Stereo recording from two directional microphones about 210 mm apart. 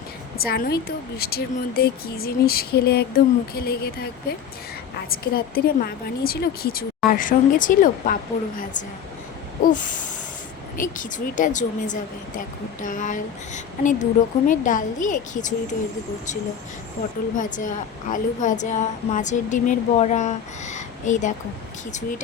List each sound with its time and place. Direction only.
0.3 s a woman's voice: 45° left (ahead or behind)
17.3 s a woman's voice: 40° left (ahead or behind)